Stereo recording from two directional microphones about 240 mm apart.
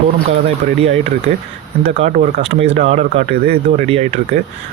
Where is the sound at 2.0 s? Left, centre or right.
Right.